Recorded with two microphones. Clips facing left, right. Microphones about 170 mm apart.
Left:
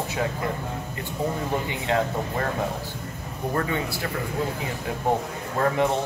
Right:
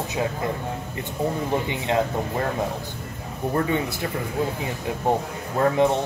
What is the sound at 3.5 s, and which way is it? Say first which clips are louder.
Speech: right 3 dB; 20° right (ahead or behind).